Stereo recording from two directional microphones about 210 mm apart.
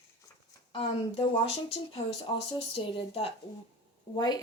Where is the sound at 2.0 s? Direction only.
35° left (ahead or behind).